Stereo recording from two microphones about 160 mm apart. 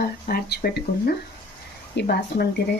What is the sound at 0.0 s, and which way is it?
Speech, 75° left (ahead or behind).